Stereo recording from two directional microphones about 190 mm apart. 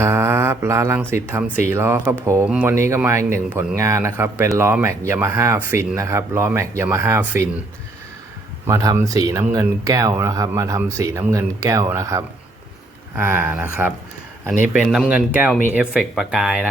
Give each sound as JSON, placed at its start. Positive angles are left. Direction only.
{"t": 0.0, "sound": "speech", "side_deg": -15}
{"t": 8.6, "sound": "speech", "side_deg": -15}